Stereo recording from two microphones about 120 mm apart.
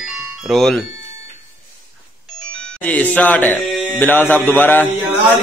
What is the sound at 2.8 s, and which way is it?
Speech, 10° left (ahead or behind).